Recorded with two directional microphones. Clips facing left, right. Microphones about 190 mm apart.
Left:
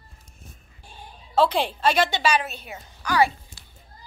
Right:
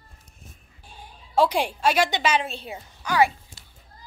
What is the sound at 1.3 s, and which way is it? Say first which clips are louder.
A woman's voice: even; 10° right (ahead or behind).